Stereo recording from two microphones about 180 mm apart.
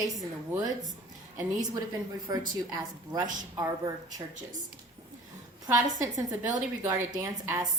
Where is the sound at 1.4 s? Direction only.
20° right (ahead or behind).